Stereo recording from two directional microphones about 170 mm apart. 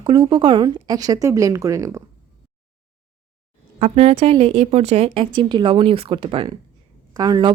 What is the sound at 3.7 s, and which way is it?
Speech, 35° right (ahead or behind).